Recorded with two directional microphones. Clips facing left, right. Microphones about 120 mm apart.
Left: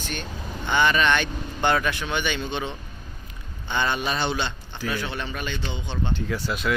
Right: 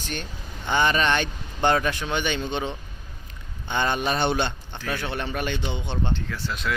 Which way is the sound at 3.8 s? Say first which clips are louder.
Right 2 dB; 45° right (ahead or behind).